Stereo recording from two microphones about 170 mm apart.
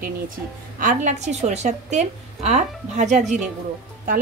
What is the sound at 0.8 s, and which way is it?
A woman's voice, 45° right (ahead or behind).